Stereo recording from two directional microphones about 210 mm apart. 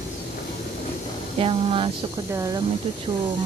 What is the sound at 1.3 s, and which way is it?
Speech, 25° right (ahead or behind).